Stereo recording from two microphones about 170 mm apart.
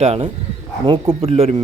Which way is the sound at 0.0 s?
40° right (ahead or behind).